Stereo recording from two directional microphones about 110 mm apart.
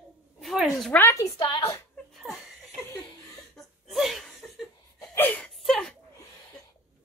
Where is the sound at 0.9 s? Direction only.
20° left (ahead or behind).